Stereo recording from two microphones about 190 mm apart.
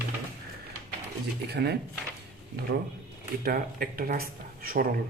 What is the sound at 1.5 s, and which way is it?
A man's voice, 60° right (ahead or behind).